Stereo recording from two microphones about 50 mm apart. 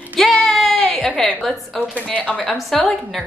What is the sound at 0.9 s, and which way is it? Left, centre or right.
Speech, centre.